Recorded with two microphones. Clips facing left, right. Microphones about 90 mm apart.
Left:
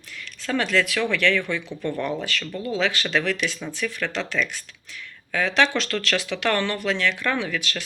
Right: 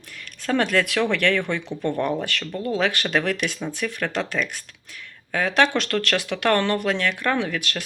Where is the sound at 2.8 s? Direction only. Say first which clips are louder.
Even; 55° right (ahead or behind).